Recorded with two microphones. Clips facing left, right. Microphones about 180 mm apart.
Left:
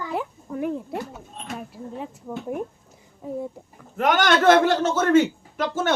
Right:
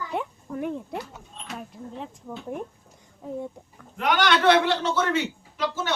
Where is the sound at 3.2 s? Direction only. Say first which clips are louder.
Left 3 dB; 5° left (ahead or behind).